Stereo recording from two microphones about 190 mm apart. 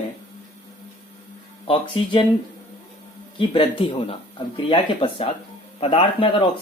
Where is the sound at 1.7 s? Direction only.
25° left (ahead or behind).